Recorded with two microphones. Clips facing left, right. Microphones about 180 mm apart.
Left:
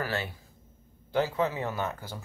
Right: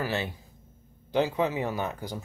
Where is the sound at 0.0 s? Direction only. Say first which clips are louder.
Right 2 dB; 20° right (ahead or behind).